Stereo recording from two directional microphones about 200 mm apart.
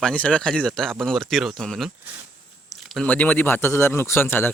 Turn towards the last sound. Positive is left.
turn(degrees=10)  # may be behind; listen again after turning